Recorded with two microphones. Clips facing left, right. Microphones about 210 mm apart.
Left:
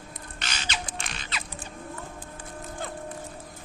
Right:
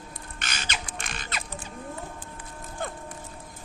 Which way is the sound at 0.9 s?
50° right (ahead or behind).